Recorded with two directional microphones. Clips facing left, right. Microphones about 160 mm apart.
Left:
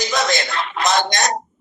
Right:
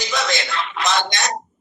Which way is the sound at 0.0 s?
40° left (ahead or behind).